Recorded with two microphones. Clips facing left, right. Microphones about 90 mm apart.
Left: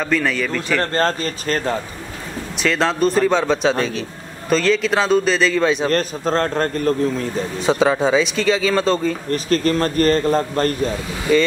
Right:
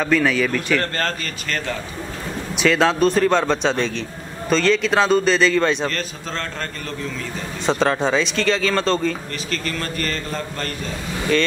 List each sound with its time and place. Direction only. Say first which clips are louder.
0.0 s speech: right 2 dB; centre (ahead or behind)
0.9 s a man's voice: left 6 dB; 30° left (ahead or behind)
2.6 s speech: right 1 dB; centre (ahead or behind)
5.9 s a man's voice: left 8 dB; 45° left (ahead or behind)
7.6 s speech: left 2 dB; 5° left (ahead or behind)
9.3 s a man's voice: left 9 dB; 40° left (ahead or behind)
11.3 s speech: left 4 dB; 5° left (ahead or behind)